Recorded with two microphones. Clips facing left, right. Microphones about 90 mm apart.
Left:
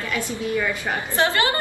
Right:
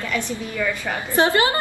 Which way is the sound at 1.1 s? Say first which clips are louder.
Right 3 dB; 20° right (ahead or behind).